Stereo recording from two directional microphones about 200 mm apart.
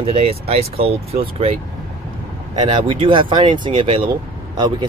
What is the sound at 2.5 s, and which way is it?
Speech, 25° right (ahead or behind).